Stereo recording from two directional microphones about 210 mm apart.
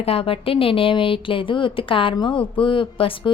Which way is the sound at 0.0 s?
25° left (ahead or behind).